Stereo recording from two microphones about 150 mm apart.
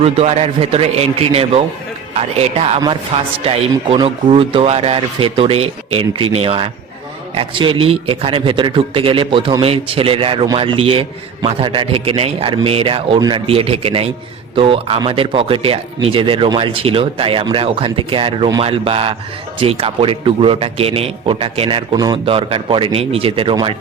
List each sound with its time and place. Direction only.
0.0 s a man's voice: 45° right (ahead or behind); by 13.4 s 30° right (ahead or behind)
13.5 s speech: 40° right (ahead or behind)
22.3 s speech: 35° right (ahead or behind)